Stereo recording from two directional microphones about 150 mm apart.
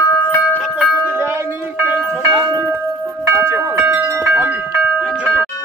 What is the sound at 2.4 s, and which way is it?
Tubular bells, 20° right (ahead or behind).